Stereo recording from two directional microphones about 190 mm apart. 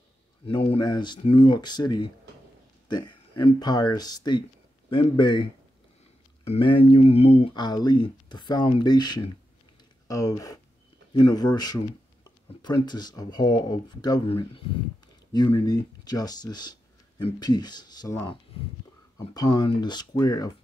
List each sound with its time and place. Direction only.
0.7 s speech: 25° left (ahead or behind)